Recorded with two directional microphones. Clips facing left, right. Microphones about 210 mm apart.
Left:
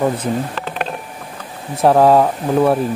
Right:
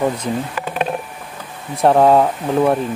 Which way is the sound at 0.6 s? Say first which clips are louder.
Right 2 dB; 15° right (ahead or behind).